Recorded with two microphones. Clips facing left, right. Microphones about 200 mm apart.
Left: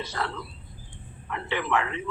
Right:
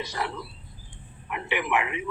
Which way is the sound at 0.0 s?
15° right (ahead or behind).